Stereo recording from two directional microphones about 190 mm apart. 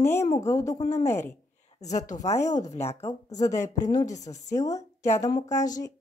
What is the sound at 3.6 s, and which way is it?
A woman's voice, 20° left (ahead or behind).